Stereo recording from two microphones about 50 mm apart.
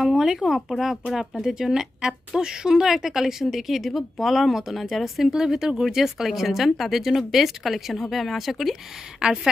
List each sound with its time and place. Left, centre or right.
0.0 s speech: centre
1.1 s a woman's voice: centre
5.3 s speech: centre
9.2 s a woman's voice: centre